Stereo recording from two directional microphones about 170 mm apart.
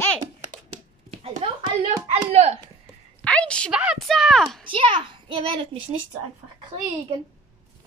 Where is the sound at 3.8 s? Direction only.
Centre (ahead or behind).